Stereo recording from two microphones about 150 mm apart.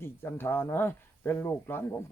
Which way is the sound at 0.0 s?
15° left (ahead or behind).